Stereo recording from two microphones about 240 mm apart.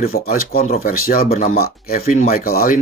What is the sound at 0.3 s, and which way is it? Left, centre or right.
Speech, left.